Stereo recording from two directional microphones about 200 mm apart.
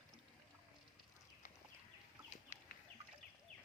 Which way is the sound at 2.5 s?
35° left (ahead or behind).